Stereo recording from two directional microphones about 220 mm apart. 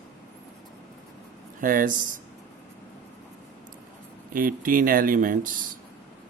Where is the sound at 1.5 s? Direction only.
40° right (ahead or behind).